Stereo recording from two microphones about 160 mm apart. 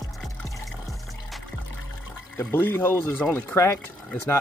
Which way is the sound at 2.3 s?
15° left (ahead or behind).